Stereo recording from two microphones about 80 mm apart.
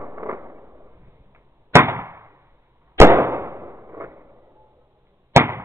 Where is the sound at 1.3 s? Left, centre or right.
Right.